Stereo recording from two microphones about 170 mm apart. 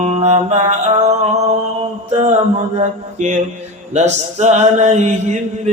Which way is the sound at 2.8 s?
45° right (ahead or behind).